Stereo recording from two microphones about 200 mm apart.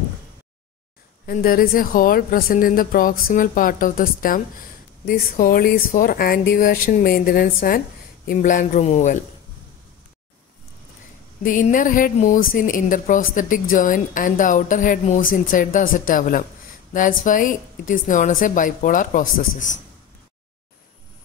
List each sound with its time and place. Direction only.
1.2 s a woman's voice: 45° left (ahead or behind)
11.4 s a woman's voice: 40° left (ahead or behind)